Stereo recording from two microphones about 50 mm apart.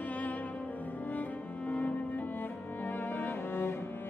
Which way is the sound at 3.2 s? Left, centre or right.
Left.